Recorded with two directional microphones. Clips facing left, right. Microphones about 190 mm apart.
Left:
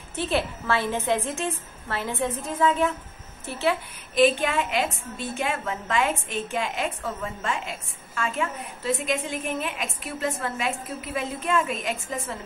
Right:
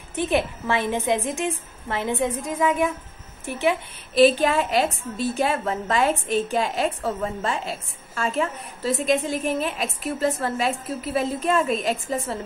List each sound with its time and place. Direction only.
0.1 s a woman's voice: 15° right (ahead or behind)
4.1 s a woman's voice: 35° right (ahead or behind)